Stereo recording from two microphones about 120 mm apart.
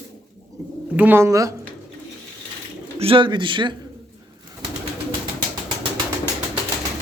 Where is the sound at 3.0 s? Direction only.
45° right (ahead or behind).